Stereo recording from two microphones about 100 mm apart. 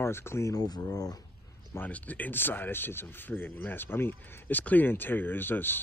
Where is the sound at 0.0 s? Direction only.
25° left (ahead or behind).